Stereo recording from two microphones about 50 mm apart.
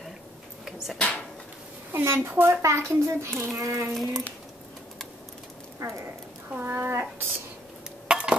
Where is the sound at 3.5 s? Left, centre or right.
Right.